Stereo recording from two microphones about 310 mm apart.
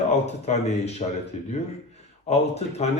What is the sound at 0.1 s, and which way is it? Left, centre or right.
Speech, left.